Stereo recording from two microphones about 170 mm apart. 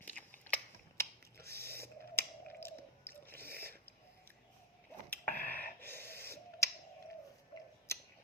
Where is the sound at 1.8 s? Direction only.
15° left (ahead or behind).